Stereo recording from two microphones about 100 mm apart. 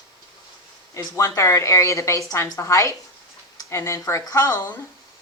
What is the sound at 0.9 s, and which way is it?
Speech, 30° left (ahead or behind).